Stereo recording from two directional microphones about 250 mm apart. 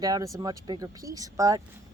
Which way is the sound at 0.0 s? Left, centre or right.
Centre.